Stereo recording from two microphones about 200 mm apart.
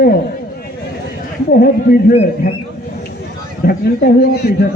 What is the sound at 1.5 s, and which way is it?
Speech, 50° left (ahead or behind).